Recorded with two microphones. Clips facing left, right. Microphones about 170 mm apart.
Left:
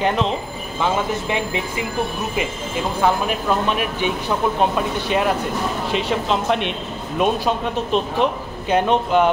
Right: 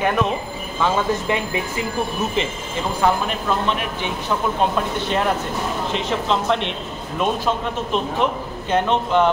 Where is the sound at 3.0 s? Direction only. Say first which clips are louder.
Left 1 dB; 10° left (ahead or behind).